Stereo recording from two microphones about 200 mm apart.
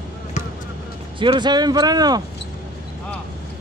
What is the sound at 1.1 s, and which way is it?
Speech, 25° right (ahead or behind).